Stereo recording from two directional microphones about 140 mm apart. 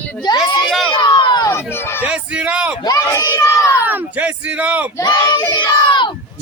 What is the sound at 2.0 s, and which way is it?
Speech, 10° right (ahead or behind).